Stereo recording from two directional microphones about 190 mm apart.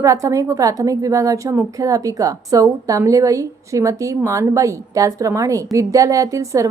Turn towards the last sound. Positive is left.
turn(degrees=-15)  # may be behind; listen again after turning